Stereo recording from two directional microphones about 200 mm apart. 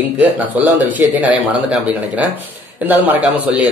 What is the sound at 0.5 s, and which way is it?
Speech, 10° right (ahead or behind).